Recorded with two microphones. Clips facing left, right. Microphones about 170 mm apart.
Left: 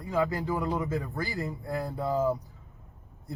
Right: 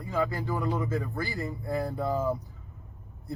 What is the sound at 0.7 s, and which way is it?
Speech, 20° left (ahead or behind).